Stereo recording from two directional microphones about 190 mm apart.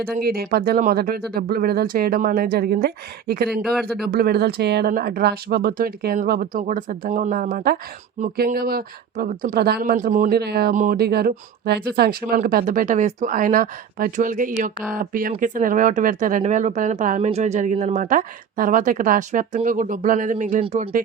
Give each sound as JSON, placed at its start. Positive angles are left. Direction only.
{"t": 0.0, "sound": "speech", "side_deg": -55}
{"t": 3.8, "sound": "speech", "side_deg": 0}
{"t": 4.0, "sound": "speech", "side_deg": -55}